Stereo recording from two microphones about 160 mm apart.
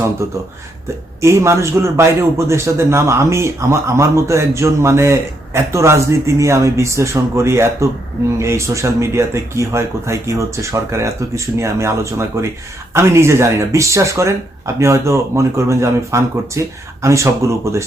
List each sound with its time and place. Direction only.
0.2 s a man's voice: 20° right (ahead or behind)